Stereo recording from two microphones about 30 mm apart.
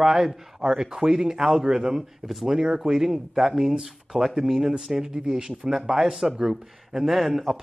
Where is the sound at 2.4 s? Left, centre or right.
Right.